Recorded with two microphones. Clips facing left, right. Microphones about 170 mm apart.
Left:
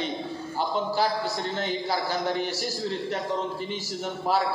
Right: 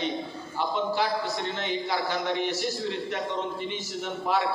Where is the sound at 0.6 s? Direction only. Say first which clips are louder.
Left 1 dB; 35° left (ahead or behind).